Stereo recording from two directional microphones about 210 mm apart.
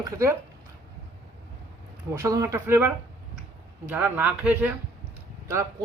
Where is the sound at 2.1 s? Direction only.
15° right (ahead or behind).